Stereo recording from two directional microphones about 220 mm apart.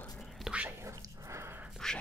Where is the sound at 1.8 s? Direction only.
Centre (ahead or behind).